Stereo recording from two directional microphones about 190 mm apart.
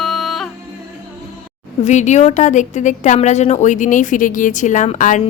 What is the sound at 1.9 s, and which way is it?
A woman's voice, 40° left (ahead or behind).